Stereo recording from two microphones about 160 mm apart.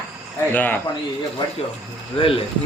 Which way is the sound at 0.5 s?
10° left (ahead or behind).